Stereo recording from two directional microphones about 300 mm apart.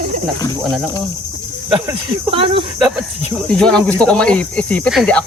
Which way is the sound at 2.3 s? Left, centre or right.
Centre.